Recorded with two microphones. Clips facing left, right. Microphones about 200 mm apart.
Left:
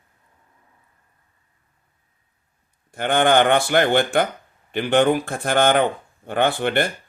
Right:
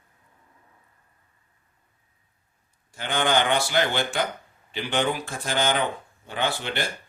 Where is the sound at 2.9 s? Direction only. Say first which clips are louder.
Left 7 dB; 55° left (ahead or behind).